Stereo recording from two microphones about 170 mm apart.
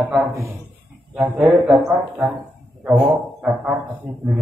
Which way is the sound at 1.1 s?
Centre (ahead or behind).